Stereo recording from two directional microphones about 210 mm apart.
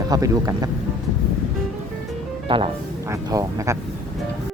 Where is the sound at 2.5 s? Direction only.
25° right (ahead or behind).